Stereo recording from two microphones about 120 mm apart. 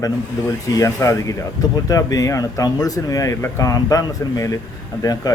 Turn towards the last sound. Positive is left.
turn(degrees=30)  # may be behind; listen again after turning